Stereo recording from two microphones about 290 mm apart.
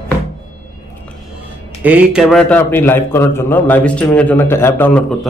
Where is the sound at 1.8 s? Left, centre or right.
Centre.